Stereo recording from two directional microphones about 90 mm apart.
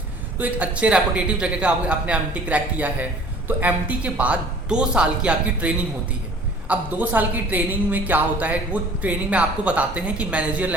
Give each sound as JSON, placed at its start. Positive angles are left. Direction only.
{"t": 0.3, "sound": "a man's voice", "side_deg": -15}